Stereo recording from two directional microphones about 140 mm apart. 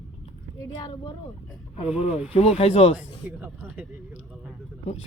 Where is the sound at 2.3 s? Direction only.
45° left (ahead or behind).